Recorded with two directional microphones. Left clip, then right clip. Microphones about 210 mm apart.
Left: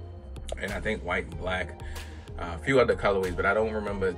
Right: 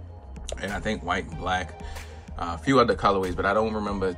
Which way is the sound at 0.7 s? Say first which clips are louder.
Right 2 dB; 5° right (ahead or behind).